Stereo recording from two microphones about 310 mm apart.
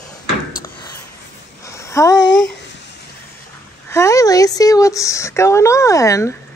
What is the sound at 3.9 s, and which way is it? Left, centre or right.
Speech, centre.